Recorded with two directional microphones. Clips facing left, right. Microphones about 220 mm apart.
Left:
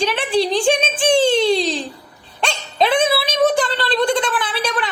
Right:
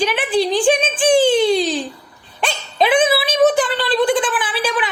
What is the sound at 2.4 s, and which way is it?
Dog, centre (ahead or behind).